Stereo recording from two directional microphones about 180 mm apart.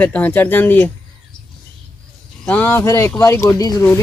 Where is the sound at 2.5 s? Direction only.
10° left (ahead or behind).